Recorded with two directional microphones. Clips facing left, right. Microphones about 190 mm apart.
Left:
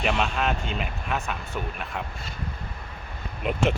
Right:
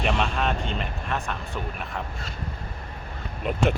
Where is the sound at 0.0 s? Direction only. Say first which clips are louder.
Even; centre (ahead or behind).